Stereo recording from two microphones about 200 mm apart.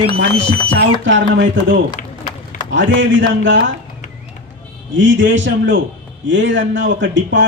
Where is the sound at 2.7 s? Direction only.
65° right (ahead or behind).